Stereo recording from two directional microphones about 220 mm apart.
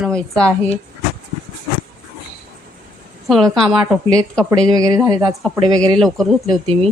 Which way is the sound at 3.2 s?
Centre (ahead or behind).